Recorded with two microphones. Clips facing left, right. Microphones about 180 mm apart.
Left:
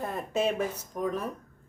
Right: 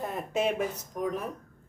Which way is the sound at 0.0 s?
20° right (ahead or behind).